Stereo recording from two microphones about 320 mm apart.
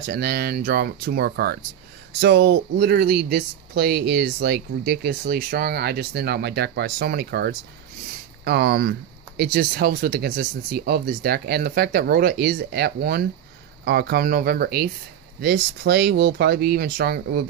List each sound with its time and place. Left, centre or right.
0.0 s speech: right